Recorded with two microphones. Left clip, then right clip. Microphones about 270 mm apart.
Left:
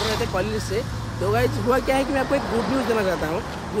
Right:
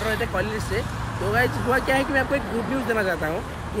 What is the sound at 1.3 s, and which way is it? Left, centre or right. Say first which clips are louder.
Speech: even; centre.